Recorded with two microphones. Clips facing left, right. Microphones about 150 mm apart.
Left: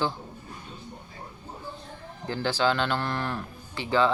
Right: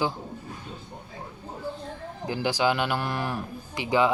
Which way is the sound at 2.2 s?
15° right (ahead or behind).